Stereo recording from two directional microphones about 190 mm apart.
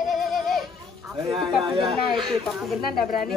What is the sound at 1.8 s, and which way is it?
Speech, 25° right (ahead or behind).